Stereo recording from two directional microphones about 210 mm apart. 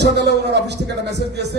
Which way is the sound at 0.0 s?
50° right (ahead or behind).